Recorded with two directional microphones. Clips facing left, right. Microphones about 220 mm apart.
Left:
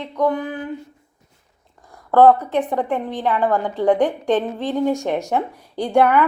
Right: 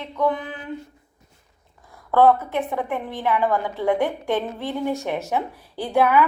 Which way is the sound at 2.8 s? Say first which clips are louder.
Left 4 dB; 15° left (ahead or behind).